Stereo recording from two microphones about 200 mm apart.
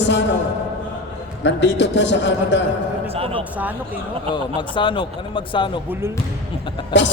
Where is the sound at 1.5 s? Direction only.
60° left (ahead or behind).